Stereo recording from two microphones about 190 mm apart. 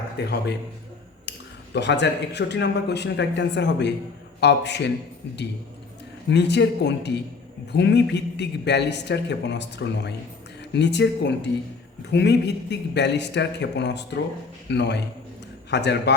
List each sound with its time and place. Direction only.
0.2 s a man's voice: 60° left (ahead or behind)
1.7 s a man's voice: 65° left (ahead or behind)
6.3 s a man's voice: 65° left (ahead or behind)